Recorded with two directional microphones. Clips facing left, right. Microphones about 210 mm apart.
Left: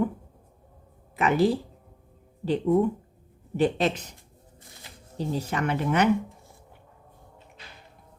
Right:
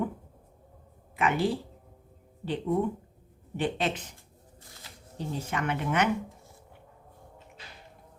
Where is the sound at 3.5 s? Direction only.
40° left (ahead or behind).